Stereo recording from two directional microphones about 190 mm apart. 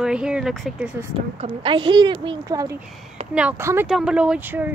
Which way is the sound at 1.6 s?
25° right (ahead or behind).